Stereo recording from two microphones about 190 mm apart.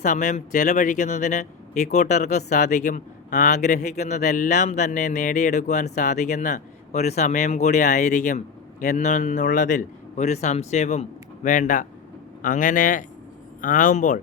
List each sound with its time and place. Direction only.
0.0 s speech: 40° left (ahead or behind)